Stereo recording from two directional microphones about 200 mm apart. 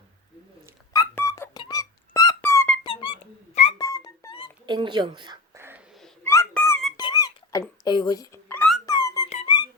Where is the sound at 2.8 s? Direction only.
25° left (ahead or behind).